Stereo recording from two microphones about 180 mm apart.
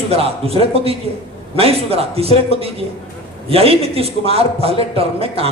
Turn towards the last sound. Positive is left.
turn(degrees=-30)  # may be behind; listen again after turning